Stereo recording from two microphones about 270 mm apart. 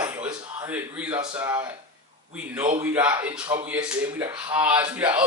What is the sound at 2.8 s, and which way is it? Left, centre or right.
Speech, centre.